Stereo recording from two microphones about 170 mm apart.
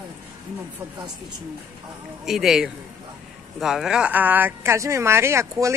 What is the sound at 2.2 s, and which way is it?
Speech, centre (ahead or behind).